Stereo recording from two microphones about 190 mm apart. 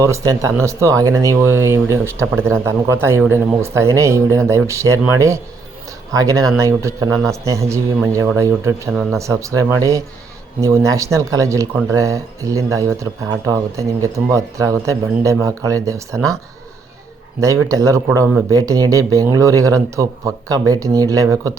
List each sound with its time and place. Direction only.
0.0 s speech: 15° right (ahead or behind)
17.4 s speech: 15° right (ahead or behind)